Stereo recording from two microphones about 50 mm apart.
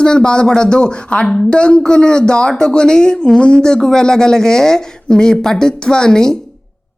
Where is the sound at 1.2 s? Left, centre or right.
Centre.